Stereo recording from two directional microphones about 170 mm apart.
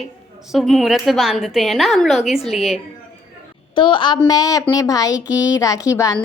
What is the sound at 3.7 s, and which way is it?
A woman's voice, 30° left (ahead or behind).